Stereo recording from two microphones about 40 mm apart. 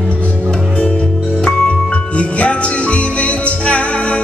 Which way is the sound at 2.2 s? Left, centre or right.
Left.